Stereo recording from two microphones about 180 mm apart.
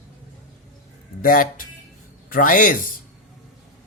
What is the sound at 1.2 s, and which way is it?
Speech, 50° left (ahead or behind).